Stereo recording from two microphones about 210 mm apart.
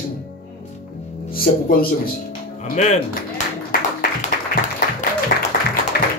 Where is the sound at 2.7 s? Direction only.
35° left (ahead or behind).